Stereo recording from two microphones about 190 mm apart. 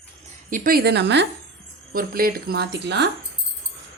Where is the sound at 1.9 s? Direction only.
50° right (ahead or behind).